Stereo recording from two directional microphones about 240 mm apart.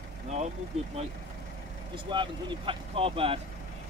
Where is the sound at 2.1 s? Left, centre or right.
Centre.